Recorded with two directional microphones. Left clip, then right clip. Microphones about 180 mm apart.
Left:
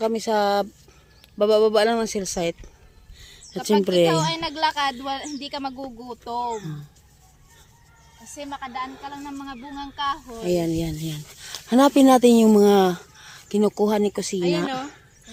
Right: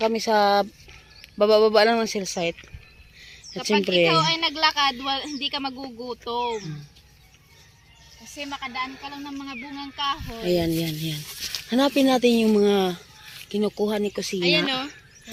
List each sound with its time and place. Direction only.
0.0 s speech: 5° left (ahead or behind); by 6.7 s 20° left (ahead or behind)
8.4 s speech: centre (ahead or behind)
10.4 s speech: 10° left (ahead or behind)
11.7 s speech: 25° left (ahead or behind)
14.4 s speech: centre (ahead or behind)